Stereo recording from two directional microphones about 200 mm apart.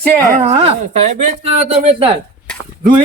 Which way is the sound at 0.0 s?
45° right (ahead or behind).